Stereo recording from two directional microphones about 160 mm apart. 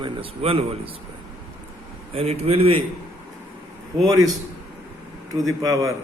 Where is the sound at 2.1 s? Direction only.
40° right (ahead or behind).